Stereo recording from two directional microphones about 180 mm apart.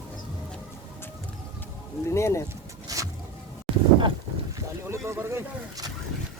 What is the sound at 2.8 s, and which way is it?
Vehicle, 20° right (ahead or behind).